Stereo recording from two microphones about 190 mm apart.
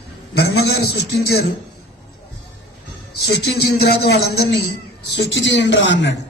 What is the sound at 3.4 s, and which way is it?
A man's voice, 60° left (ahead or behind).